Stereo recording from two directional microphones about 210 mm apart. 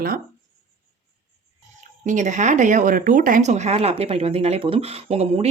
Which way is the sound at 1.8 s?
35° right (ahead or behind).